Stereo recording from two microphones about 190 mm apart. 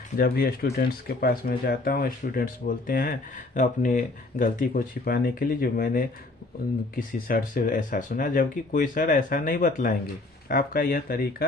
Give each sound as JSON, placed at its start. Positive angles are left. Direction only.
{"t": 0.2, "sound": "speech", "side_deg": 55}